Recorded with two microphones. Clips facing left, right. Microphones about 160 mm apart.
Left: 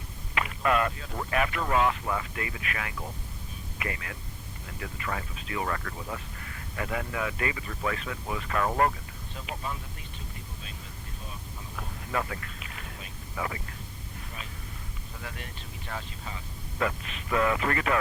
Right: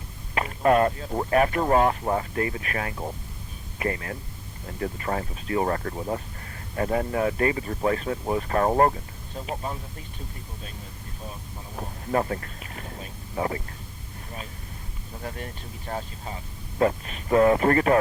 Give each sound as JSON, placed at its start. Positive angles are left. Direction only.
{"t": 0.3, "sound": "speech", "side_deg": -35}
{"t": 11.8, "sound": "speech", "side_deg": -35}
{"t": 15.2, "sound": "speech", "side_deg": -35}